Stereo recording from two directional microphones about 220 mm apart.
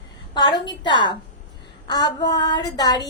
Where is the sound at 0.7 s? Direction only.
20° left (ahead or behind).